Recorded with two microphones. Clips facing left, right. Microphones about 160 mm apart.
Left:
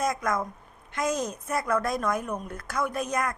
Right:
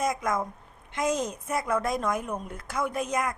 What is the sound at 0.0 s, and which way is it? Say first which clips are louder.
A woman's voice: even; 20° right (ahead or behind).